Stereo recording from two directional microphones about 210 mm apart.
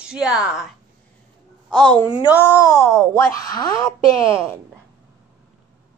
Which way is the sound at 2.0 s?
20° left (ahead or behind).